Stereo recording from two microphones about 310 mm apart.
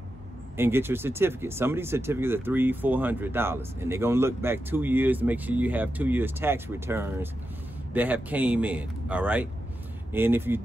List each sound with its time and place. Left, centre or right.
0.6 s speech: centre